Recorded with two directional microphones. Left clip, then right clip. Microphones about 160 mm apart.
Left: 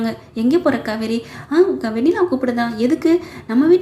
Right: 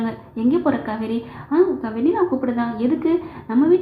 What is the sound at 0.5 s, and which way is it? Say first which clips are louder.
A woman's voice: left 4 dB; 20° left (ahead or behind).